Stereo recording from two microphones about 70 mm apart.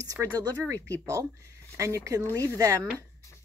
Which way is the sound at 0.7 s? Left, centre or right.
Right.